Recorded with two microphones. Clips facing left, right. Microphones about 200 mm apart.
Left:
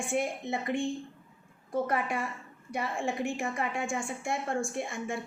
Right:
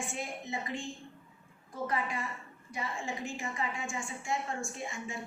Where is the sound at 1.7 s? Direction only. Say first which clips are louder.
Left 5 dB; 65° left (ahead or behind).